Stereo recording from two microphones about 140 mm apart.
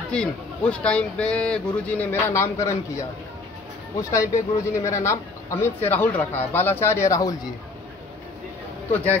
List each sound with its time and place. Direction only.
0.1 s a man's voice: 5° left (ahead or behind); by 7.3 s 25° left (ahead or behind)
8.9 s a man's voice: 10° left (ahead or behind)